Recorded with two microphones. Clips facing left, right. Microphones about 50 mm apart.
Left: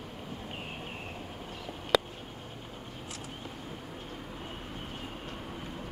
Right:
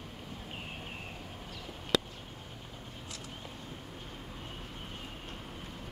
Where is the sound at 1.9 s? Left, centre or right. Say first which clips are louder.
Left 4 dB; centre.